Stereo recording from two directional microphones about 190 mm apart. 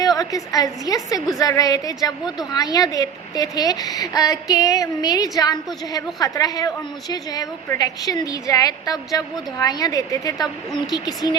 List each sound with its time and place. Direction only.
0.2 s a woman's voice: 20° left (ahead or behind)